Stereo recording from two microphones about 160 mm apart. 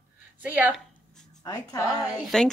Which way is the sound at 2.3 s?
5° left (ahead or behind).